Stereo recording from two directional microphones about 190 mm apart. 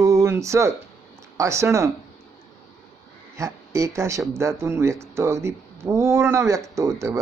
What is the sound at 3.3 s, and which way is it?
Speech, 15° right (ahead or behind).